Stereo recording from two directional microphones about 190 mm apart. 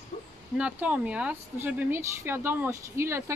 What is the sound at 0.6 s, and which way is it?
Speech, 5° right (ahead or behind).